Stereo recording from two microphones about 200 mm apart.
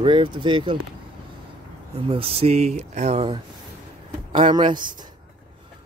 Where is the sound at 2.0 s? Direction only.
30° right (ahead or behind).